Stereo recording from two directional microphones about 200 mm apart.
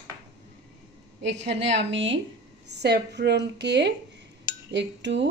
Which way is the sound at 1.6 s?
65° right (ahead or behind).